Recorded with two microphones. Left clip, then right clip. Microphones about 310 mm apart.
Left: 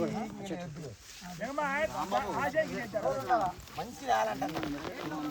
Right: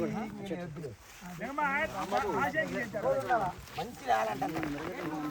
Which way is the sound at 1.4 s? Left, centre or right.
Left.